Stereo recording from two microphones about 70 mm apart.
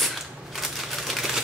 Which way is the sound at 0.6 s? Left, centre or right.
Centre.